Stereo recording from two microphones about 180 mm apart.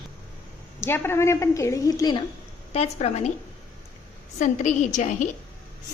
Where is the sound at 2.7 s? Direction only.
35° left (ahead or behind).